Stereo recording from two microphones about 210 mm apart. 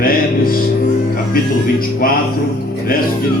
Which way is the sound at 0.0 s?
45° left (ahead or behind).